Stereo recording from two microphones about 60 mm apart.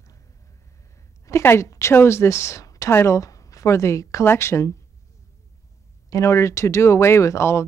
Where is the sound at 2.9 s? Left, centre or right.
Left.